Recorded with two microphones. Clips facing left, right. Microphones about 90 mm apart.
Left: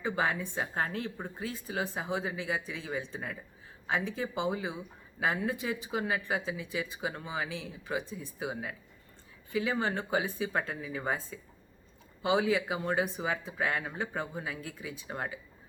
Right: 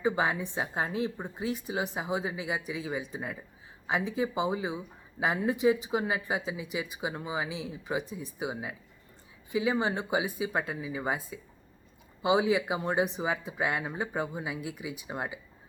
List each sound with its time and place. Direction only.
0.0 s speech: 15° right (ahead or behind)